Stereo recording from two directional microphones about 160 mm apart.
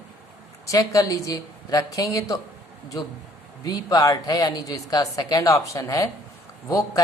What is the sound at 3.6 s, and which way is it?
Speech, 25° left (ahead or behind).